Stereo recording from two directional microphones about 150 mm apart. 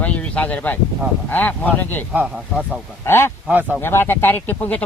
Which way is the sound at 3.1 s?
15° left (ahead or behind).